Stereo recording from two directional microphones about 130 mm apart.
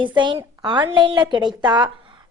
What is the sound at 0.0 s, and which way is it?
A woman's voice, 35° right (ahead or behind).